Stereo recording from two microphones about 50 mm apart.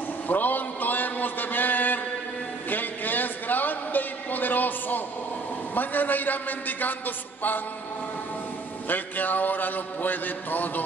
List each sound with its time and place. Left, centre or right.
0.3 s a man's voice: left
2.7 s a sound: left
5.8 s a man's voice: left
8.8 s a man's voice: left